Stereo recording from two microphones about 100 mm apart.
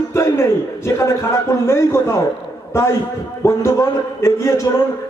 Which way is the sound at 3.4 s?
30° left (ahead or behind).